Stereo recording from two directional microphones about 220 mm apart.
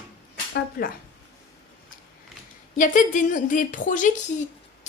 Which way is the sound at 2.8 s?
35° left (ahead or behind).